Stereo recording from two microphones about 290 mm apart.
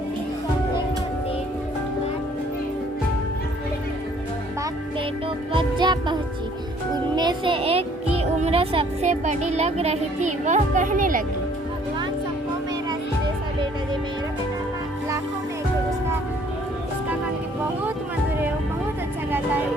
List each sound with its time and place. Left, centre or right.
5.5 s music: centre
7.2 s music: centre
8.1 s speech: right